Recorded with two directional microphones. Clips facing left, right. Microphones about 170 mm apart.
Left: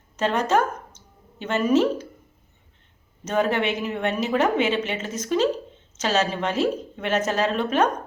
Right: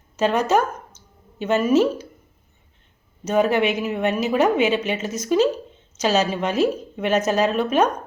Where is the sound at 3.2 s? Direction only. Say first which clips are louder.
Right 4 dB; 10° right (ahead or behind).